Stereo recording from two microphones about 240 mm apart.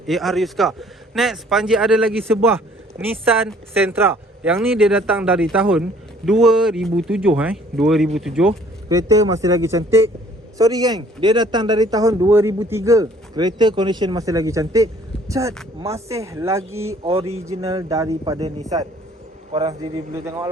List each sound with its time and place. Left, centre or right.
0.1 s a man's voice: centre
3.8 s a man's voice: centre
8.9 s speech: centre
17.0 s speech: right
19.5 s speech: centre